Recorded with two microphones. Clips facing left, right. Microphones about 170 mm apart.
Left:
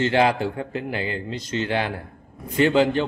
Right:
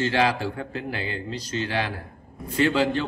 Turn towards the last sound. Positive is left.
turn(degrees=25)  # may be behind; listen again after turning